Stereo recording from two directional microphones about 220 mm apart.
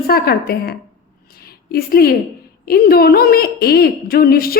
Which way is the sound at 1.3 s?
45° left (ahead or behind).